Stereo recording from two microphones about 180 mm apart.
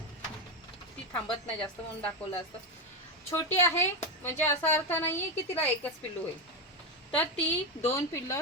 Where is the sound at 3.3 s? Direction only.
15° left (ahead or behind).